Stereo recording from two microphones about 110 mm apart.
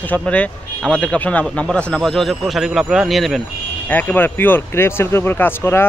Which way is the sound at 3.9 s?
15° left (ahead or behind).